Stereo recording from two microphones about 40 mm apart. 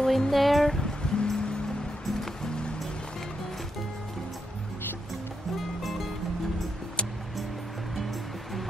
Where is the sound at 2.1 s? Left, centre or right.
Centre.